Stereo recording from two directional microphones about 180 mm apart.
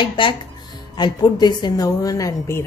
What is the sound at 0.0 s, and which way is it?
A woman's voice, 25° left (ahead or behind).